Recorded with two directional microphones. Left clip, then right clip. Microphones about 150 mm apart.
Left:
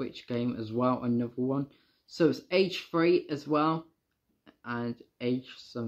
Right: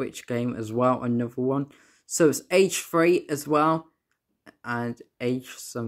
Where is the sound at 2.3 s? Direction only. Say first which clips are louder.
Right 6 dB; 45° right (ahead or behind).